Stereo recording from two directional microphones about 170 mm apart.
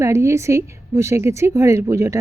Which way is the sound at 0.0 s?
15° right (ahead or behind).